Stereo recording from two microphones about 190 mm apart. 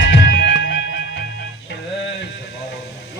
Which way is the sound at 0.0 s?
70° left (ahead or behind).